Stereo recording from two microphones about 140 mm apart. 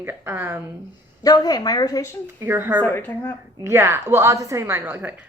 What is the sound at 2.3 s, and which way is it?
Speech, 15° right (ahead or behind).